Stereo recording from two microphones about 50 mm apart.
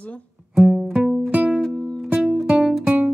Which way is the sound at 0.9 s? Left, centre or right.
Right.